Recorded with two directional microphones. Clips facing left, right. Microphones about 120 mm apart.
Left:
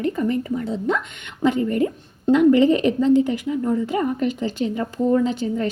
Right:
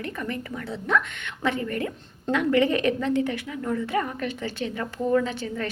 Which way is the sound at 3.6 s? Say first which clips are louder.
Left 3 dB; 20° left (ahead or behind).